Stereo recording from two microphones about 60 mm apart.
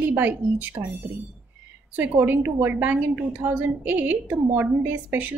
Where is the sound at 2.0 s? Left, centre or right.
Right.